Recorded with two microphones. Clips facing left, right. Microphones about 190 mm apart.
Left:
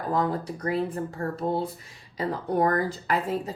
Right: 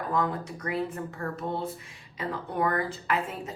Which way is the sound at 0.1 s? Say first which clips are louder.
Left 4 dB; 35° left (ahead or behind).